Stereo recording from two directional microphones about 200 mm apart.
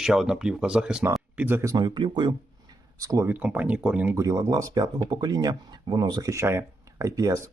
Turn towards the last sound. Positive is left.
turn(degrees=-15)  # may be behind; listen again after turning